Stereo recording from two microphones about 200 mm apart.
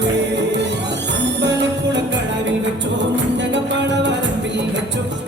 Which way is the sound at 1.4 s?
60° right (ahead or behind).